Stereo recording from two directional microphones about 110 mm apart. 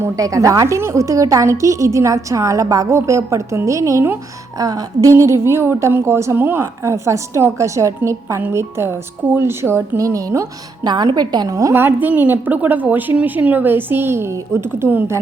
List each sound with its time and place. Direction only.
0.0 s a woman's voice: 30° right (ahead or behind)